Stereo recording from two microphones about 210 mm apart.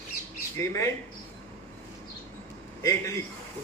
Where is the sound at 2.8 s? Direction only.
15° left (ahead or behind).